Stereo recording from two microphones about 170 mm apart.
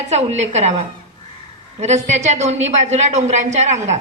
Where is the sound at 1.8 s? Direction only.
40° right (ahead or behind).